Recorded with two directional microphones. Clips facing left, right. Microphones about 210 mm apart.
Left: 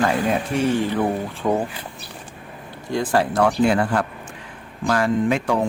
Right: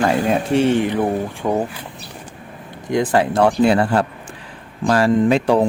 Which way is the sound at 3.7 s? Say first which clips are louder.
Right 4 dB; 30° right (ahead or behind).